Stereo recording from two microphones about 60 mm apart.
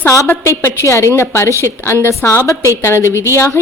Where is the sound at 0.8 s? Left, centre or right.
Left.